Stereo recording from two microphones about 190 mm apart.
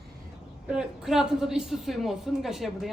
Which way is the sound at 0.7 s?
5° right (ahead or behind).